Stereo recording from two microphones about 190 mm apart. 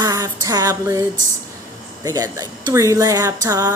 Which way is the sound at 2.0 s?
20° right (ahead or behind).